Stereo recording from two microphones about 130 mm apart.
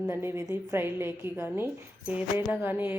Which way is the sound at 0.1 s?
20° right (ahead or behind).